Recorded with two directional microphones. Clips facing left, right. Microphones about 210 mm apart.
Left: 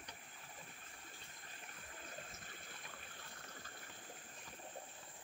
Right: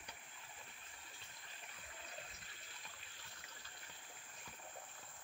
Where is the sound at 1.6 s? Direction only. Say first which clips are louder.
Left 2 dB; 45° left (ahead or behind).